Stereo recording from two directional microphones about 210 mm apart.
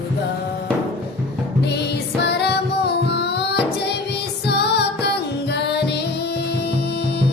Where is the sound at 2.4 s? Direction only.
50° left (ahead or behind).